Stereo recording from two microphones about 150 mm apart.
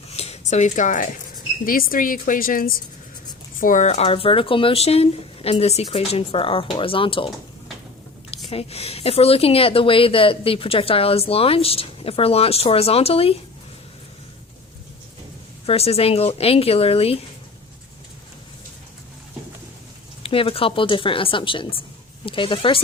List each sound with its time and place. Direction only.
0.1 s a sound: 45° left (ahead or behind)
1.6 s a woman's voice: 70° left (ahead or behind); by 7.3 s 35° left (ahead or behind)
8.4 s speech: 40° left (ahead or behind)
15.6 s speech: 40° left (ahead or behind)
20.2 s speech: 35° left (ahead or behind)